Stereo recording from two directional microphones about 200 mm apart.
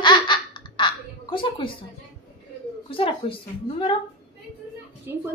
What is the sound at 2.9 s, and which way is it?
A woman's voice, 25° left (ahead or behind).